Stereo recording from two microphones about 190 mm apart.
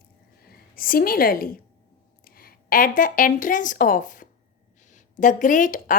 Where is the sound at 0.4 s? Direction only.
50° left (ahead or behind).